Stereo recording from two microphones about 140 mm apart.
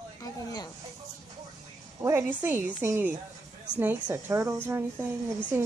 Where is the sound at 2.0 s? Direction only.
15° right (ahead or behind).